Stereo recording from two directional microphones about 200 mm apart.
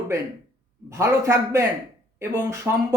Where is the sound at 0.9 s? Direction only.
15° right (ahead or behind).